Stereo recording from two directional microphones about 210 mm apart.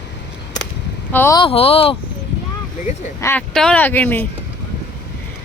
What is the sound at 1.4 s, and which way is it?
Speech, 25° left (ahead or behind).